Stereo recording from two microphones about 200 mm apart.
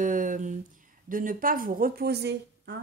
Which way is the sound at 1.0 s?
45° right (ahead or behind).